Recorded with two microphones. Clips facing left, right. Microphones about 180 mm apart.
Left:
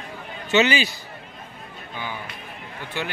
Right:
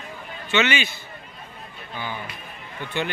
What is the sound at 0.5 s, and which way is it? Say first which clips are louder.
Speech: left 3 dB; 35° left (ahead or behind).